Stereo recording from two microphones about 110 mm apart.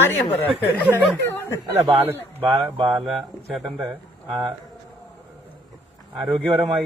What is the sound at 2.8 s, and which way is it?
Speech, 40° right (ahead or behind).